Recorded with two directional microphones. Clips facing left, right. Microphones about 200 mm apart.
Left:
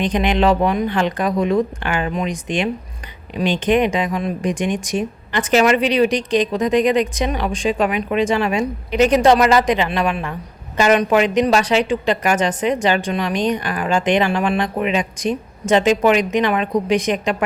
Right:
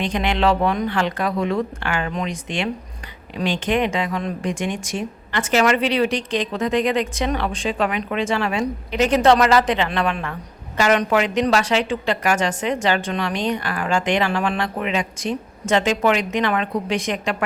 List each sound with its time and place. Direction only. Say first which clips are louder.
0.0 s a woman's voice: left 3 dB; 20° left (ahead or behind)